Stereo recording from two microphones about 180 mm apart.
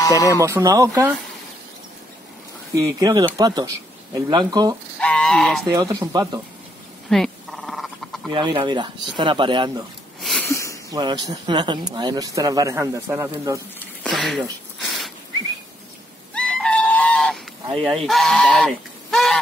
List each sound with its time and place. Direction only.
0.0 s speech: 20° left (ahead or behind)
0.4 s speech: 15° right (ahead or behind)
2.7 s speech: 20° right (ahead or behind)
5.0 s speech: 5° left (ahead or behind)
5.7 s speech: 20° right (ahead or behind)
7.1 s frog: centre (ahead or behind)
8.3 s speech: 25° right (ahead or behind)
10.2 s sniff: centre (ahead or behind)
10.5 s a sound: 15° left (ahead or behind)
10.9 s speech: 20° right (ahead or behind)
14.0 s a sound: centre (ahead or behind)
16.3 s goat: 5° left (ahead or behind)
17.8 s speech: centre (ahead or behind)